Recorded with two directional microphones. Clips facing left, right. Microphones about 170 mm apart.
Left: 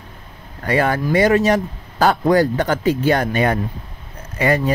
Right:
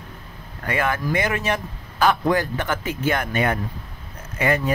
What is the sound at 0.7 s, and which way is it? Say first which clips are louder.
Speech: left 5 dB; 35° left (ahead or behind).